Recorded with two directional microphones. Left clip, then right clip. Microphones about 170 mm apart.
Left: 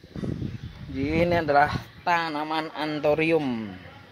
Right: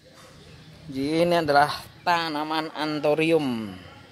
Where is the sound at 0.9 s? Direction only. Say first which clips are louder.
Right 2 dB; 15° right (ahead or behind).